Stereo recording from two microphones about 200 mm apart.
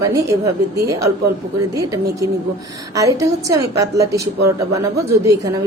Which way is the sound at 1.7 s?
15° right (ahead or behind).